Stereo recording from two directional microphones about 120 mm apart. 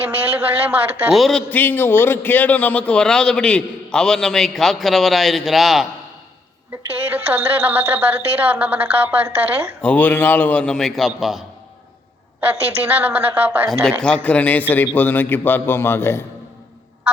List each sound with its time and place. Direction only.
0.0 s a woman's voice: 15° right (ahead or behind)
1.1 s a man's voice: 5° left (ahead or behind)
7.0 s a woman's voice: 10° right (ahead or behind)
9.8 s a man's voice: 15° left (ahead or behind)
12.9 s a woman's voice: 10° right (ahead or behind)
13.8 s a man's voice: 5° left (ahead or behind)